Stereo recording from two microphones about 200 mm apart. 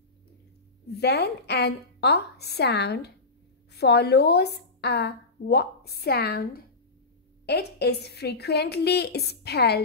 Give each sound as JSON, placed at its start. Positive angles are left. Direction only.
{"t": 0.9, "sound": "a woman's voice", "side_deg": 55}